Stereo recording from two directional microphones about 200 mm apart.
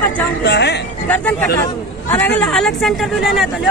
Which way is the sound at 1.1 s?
10° left (ahead or behind).